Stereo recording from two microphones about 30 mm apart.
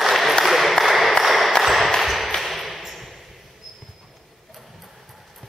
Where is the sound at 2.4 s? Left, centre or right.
Centre.